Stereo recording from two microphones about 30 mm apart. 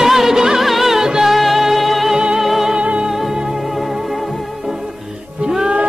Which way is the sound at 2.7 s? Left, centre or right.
Right.